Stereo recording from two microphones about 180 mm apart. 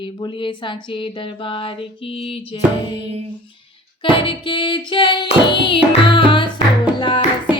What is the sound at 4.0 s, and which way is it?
Music, 30° left (ahead or behind).